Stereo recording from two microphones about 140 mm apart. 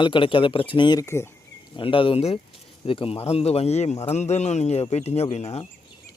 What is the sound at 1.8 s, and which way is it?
A man's voice, 40° left (ahead or behind).